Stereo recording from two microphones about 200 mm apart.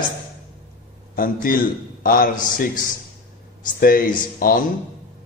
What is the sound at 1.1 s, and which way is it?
A man's voice, 45° left (ahead or behind).